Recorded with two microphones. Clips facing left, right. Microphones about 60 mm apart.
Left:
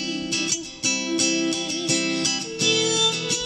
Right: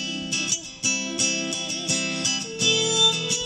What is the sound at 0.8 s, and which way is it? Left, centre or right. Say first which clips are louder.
Music: left 4 dB; left.